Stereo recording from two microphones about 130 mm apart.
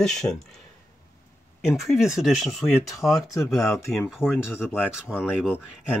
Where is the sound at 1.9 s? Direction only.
5° right (ahead or behind).